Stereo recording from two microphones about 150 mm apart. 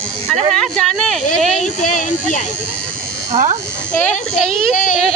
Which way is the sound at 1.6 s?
55° left (ahead or behind).